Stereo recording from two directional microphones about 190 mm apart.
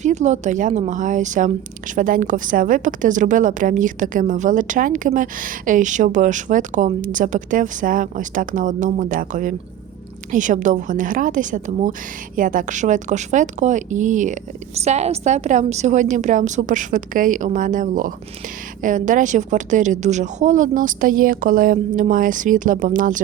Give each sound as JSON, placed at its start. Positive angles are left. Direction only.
{"t": 0.0, "sound": "a woman's voice", "side_deg": -40}